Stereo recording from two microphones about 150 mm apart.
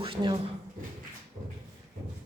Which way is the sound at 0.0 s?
35° right (ahead or behind).